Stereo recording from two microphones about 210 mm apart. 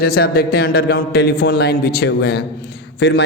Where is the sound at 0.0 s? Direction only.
45° left (ahead or behind).